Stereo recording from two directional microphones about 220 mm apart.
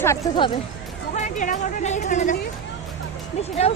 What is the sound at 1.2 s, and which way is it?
A woman's voice, 35° left (ahead or behind).